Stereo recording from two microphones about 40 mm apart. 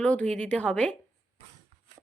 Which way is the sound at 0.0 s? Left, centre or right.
Left.